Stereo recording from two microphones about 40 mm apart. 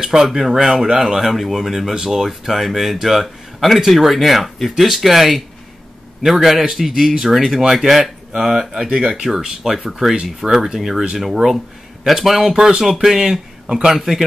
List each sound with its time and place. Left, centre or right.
0.0 s speech: centre
12.5 s speech: centre